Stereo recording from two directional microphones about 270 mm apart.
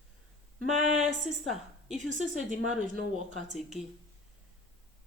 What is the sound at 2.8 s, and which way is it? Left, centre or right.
Speech, right.